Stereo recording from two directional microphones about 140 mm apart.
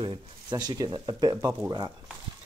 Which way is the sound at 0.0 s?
35° right (ahead or behind).